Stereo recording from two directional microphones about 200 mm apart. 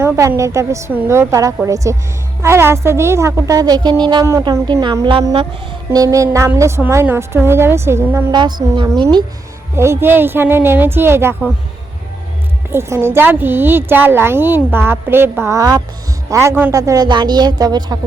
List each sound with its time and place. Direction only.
0.0 s a woman's voice: 15° right (ahead or behind)
12.7 s a woman's voice: 10° right (ahead or behind)